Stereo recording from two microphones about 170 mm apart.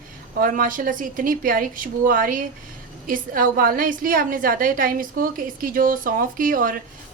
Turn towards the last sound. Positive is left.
turn(degrees=-55)  # may be behind; listen again after turning